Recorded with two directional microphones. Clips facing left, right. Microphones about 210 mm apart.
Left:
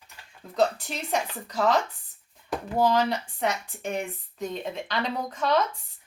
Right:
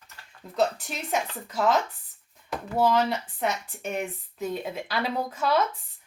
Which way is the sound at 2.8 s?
5° right (ahead or behind).